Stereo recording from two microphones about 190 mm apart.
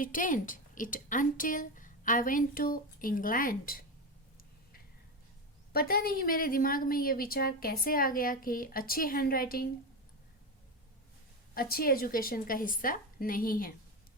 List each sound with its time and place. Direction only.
0.0 s a woman's voice: 45° left (ahead or behind)
5.7 s a woman's voice: 55° left (ahead or behind)
11.5 s a woman's voice: 50° left (ahead or behind)